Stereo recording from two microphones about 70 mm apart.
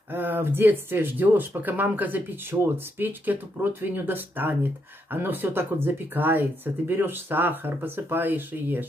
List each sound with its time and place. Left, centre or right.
0.1 s speech: right